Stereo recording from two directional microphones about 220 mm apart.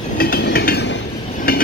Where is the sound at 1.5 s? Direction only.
40° left (ahead or behind).